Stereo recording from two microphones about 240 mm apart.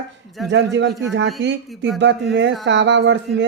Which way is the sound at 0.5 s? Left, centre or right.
Right.